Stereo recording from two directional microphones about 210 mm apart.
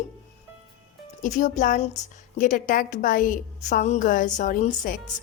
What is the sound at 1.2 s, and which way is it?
A woman's voice, 35° left (ahead or behind).